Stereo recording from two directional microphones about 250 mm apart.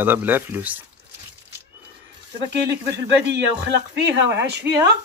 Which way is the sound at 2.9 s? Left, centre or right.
Right.